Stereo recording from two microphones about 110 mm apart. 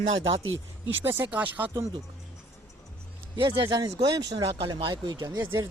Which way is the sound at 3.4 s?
45° right (ahead or behind).